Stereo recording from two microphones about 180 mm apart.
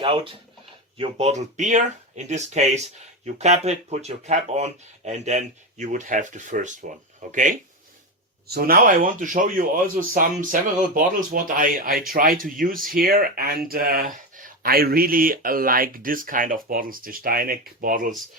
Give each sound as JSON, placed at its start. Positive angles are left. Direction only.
{"t": 0.9, "sound": "speech", "side_deg": -35}
{"t": 8.4, "sound": "speech", "side_deg": -55}